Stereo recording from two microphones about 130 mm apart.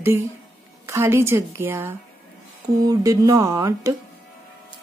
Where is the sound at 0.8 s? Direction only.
20° right (ahead or behind).